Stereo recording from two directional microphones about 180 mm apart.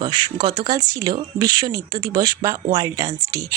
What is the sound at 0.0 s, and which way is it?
A woman's voice, 25° right (ahead or behind).